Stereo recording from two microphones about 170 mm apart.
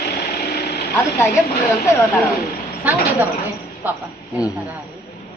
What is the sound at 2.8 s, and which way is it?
Speech, 10° right (ahead or behind).